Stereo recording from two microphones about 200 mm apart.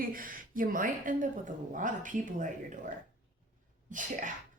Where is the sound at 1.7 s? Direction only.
40° right (ahead or behind).